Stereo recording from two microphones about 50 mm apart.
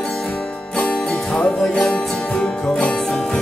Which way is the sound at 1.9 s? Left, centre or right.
Centre.